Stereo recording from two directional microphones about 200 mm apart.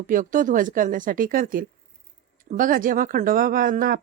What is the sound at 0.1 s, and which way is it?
Speech, 40° right (ahead or behind).